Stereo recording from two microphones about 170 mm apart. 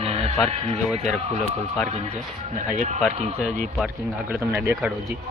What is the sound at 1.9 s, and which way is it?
Speech, 40° right (ahead or behind).